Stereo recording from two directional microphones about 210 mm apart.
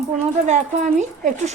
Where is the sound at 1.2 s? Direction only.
35° right (ahead or behind).